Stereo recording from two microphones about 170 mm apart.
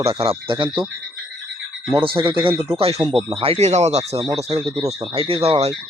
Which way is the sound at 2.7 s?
35° right (ahead or behind).